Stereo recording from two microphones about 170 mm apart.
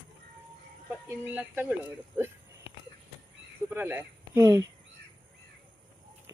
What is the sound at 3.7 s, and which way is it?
Speech, 10° right (ahead or behind).